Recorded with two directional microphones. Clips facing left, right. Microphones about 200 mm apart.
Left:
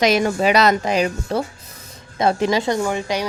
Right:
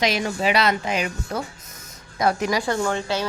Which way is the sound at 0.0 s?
50° left (ahead or behind).